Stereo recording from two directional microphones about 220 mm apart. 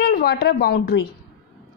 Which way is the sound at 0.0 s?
45° left (ahead or behind).